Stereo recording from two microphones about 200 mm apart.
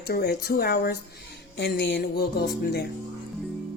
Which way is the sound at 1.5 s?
60° left (ahead or behind).